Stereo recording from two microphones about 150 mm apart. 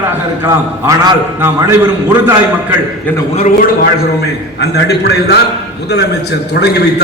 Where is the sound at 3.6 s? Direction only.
90° left.